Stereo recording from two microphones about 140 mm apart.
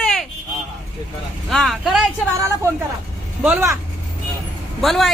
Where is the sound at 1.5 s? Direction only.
Centre (ahead or behind).